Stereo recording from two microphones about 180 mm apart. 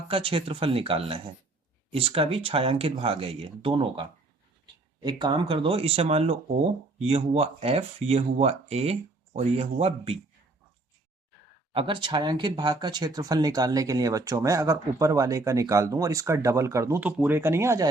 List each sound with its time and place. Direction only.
0.1 s speech: 30° right (ahead or behind)
11.7 s speech: 30° right (ahead or behind)